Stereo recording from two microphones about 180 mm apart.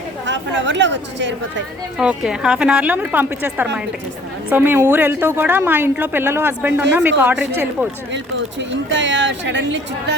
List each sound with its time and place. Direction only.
0.3 s speech: 90° right
2.0 s a woman's voice: 5° right (ahead or behind)
8.1 s speech: 85° right